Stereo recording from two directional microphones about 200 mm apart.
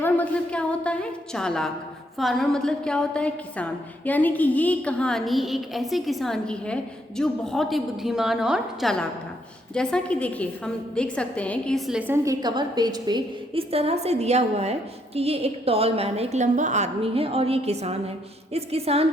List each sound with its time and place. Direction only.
0.0 s a woman's voice: 5° left (ahead or behind); by 19.0 s 30° right (ahead or behind)